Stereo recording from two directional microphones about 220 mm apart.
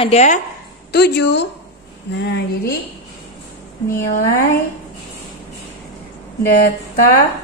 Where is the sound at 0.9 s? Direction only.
45° left (ahead or behind).